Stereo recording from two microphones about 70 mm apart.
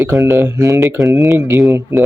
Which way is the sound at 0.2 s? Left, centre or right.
Right.